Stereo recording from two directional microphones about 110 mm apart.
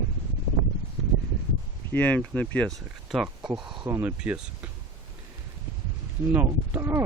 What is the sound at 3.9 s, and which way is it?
Speech, 20° right (ahead or behind).